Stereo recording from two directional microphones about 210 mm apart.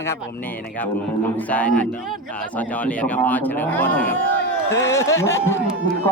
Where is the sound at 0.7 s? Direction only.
10° left (ahead or behind).